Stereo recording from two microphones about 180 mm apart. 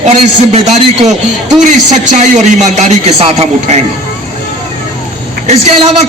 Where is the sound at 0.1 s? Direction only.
35° right (ahead or behind).